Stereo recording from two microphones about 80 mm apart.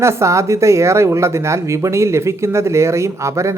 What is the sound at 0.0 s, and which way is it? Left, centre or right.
Speech, right.